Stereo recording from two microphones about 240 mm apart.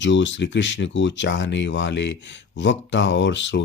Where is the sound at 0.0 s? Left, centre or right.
Left.